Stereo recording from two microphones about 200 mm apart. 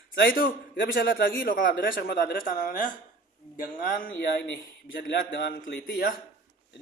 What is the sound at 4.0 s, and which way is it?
Speech, 60° left (ahead or behind).